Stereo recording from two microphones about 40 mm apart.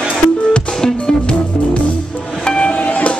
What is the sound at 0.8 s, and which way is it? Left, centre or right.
Music, left.